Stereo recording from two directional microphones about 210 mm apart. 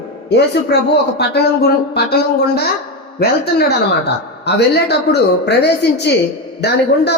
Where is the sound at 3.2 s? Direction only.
50° left (ahead or behind).